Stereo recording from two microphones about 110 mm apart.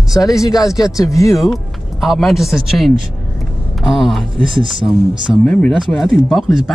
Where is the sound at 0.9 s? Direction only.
30° left (ahead or behind).